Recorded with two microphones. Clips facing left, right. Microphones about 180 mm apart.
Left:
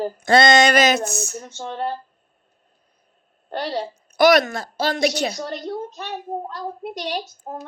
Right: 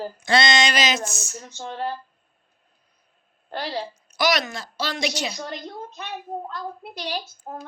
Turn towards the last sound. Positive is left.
turn(degrees=40)  # may be behind; listen again after turning